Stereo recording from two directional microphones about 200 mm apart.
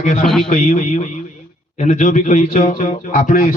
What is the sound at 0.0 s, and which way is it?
A man's voice, 35° left (ahead or behind).